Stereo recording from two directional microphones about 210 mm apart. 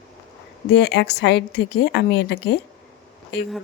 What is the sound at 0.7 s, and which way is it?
A woman's voice, 50° left (ahead or behind).